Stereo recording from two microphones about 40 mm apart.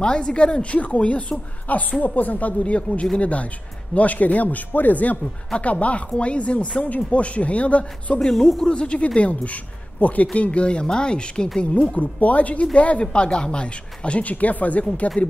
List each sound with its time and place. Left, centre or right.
0.0 s a woman's voice: left
8.2 s speech: centre
8.6 s speech: left
11.7 s speech: left
14.3 s speech: left